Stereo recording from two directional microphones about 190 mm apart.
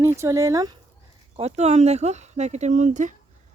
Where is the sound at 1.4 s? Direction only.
35° right (ahead or behind).